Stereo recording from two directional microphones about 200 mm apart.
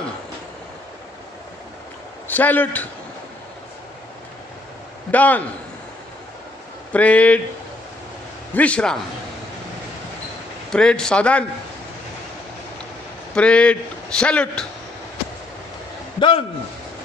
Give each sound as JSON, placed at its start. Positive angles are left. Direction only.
{"t": 2.2, "sound": "a man's voice", "side_deg": 10}
{"t": 5.1, "sound": "a man's voice", "side_deg": 10}
{"t": 6.9, "sound": "a man's voice", "side_deg": 5}
{"t": 8.5, "sound": "a man's voice", "side_deg": 5}
{"t": 10.7, "sound": "a man's voice", "side_deg": 5}
{"t": 13.3, "sound": "a man's voice", "side_deg": 5}
{"t": 16.2, "sound": "a man's voice", "side_deg": 25}